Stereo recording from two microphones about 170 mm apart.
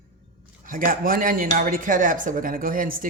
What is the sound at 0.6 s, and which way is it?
Speech, 55° right (ahead or behind).